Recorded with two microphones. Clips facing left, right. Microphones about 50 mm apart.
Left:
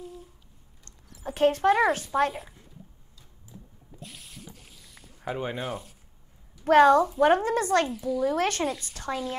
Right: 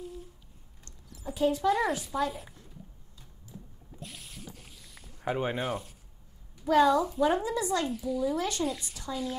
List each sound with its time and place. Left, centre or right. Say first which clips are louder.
1.2 s a woman's voice: left 5 dB; left
4.0 s a sound: even; centre
5.2 s speech: right 1 dB; centre
6.6 s a woman's voice: left 5 dB; left
8.2 s a woman's voice: left 5 dB; left